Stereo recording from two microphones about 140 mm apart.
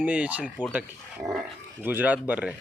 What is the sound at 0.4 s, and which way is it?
Speech, 10° left (ahead or behind).